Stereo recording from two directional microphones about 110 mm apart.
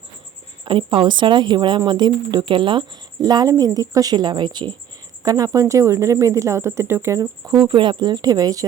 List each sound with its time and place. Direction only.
0.6 s speech: 50° right (ahead or behind); by 7.6 s 30° right (ahead or behind)
7.7 s speech: 45° right (ahead or behind)